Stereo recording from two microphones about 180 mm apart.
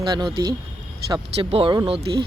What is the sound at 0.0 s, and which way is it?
Speech, 25° right (ahead or behind).